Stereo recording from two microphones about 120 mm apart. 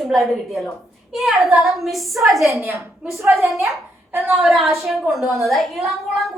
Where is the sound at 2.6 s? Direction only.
25° right (ahead or behind).